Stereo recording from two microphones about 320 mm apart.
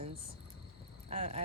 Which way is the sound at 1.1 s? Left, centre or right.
Centre.